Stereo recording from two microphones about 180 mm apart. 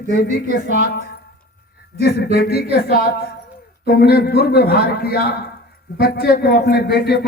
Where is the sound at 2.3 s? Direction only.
60° left (ahead or behind).